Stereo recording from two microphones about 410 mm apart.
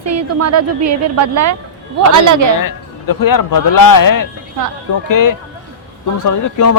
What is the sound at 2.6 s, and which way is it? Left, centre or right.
A man's voice, left.